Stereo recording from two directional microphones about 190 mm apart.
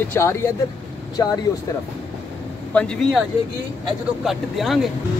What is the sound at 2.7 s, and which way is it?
Speech, 5° left (ahead or behind).